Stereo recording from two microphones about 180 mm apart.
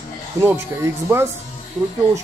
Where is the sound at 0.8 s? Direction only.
15° right (ahead or behind).